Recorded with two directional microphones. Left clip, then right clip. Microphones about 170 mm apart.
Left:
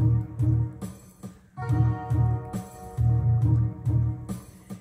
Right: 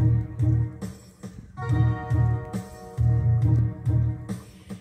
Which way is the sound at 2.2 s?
20° left (ahead or behind).